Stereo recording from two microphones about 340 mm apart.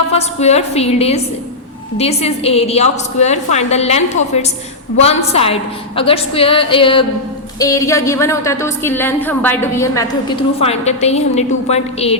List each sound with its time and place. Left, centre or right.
0.1 s a woman's voice: centre